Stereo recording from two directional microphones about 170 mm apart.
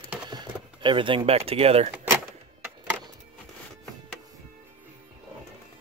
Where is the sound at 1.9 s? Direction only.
10° right (ahead or behind).